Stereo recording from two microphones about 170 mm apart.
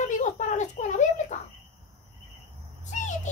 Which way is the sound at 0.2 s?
45° left (ahead or behind).